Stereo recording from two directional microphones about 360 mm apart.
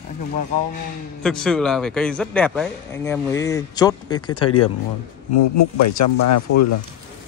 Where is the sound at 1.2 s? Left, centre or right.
Centre.